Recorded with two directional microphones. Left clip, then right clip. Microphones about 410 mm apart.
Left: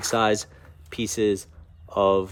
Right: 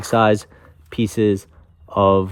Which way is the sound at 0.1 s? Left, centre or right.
Centre.